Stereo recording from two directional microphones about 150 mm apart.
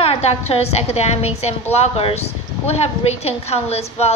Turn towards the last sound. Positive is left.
turn(degrees=45)  # may be behind; listen again after turning